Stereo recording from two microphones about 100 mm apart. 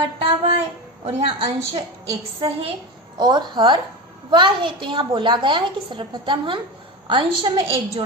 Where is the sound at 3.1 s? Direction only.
45° right (ahead or behind).